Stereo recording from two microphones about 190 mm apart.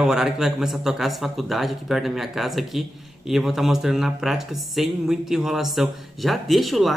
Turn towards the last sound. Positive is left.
turn(degrees=0)  # may be behind; listen again after turning